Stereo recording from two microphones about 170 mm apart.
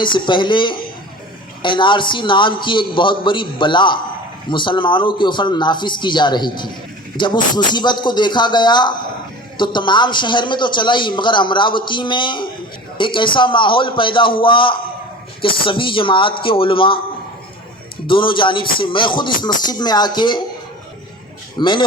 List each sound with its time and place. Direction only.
0.0 s a man's voice: 30° left (ahead or behind)
18.0 s a man's voice: 30° left (ahead or behind)
21.6 s a man's voice: 25° left (ahead or behind)